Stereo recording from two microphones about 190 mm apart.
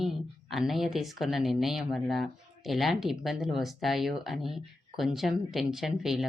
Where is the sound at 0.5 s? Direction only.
Centre (ahead or behind).